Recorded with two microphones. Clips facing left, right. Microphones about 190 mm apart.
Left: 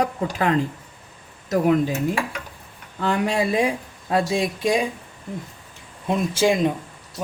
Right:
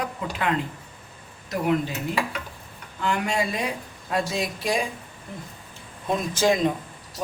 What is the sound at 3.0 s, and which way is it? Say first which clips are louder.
Speech: left 4 dB; 35° left (ahead or behind).